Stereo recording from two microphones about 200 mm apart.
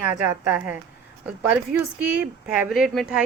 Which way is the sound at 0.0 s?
10° right (ahead or behind).